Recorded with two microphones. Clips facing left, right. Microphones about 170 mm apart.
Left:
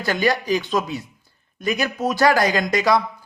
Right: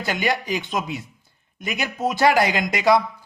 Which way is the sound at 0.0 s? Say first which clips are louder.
Left 3 dB; 20° right (ahead or behind).